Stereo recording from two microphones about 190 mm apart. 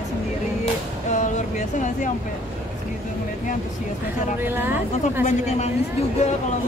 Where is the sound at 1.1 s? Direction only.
40° left (ahead or behind).